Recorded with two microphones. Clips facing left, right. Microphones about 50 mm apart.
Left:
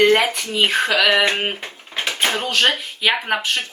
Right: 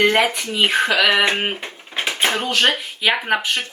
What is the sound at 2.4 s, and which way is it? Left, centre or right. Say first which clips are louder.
Speech: even; centre.